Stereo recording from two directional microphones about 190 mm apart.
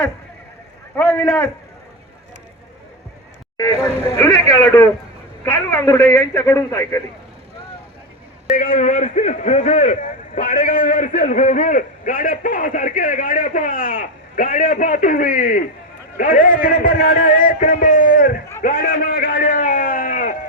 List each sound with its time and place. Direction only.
0.9 s a man's voice: 10° left (ahead or behind)
3.6 s a man's voice: 20° left (ahead or behind)
8.5 s a man's voice: 50° left (ahead or behind)
18.6 s a sound: 50° left (ahead or behind)